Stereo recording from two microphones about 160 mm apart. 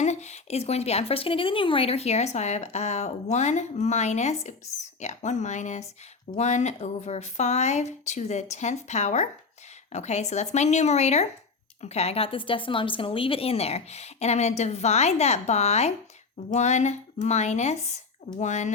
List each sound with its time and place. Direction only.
0.0 s a woman's voice: 45° left (ahead or behind)